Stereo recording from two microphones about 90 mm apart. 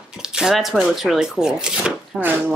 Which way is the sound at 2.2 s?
20° right (ahead or behind).